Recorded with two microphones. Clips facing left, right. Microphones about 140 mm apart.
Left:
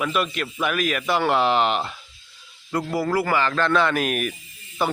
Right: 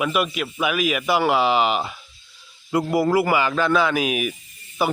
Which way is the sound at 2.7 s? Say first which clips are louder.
Right 4 dB; 15° right (ahead or behind).